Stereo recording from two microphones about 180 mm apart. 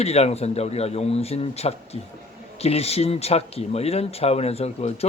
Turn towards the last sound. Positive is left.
turn(degrees=35)  # may be behind; listen again after turning